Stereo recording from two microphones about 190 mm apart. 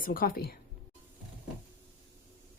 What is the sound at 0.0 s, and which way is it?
Speech, 50° left (ahead or behind).